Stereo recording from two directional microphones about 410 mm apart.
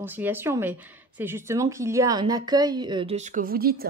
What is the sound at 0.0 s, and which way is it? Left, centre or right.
A woman's voice, centre.